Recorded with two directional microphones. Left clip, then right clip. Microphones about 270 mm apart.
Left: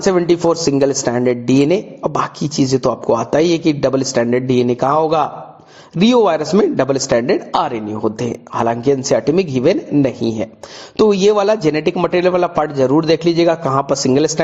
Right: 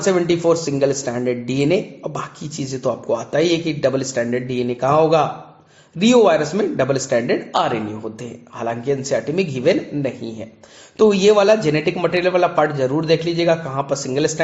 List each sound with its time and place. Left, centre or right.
0.0 s speech: left